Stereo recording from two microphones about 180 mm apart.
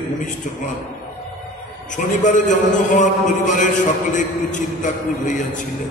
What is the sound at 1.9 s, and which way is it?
A man's voice, 45° left (ahead or behind).